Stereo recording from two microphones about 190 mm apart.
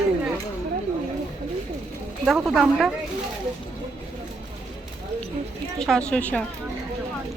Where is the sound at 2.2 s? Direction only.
Centre (ahead or behind).